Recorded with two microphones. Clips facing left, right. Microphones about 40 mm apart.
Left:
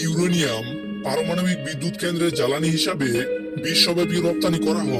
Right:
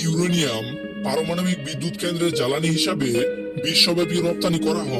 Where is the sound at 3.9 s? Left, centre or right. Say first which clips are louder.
Even; right.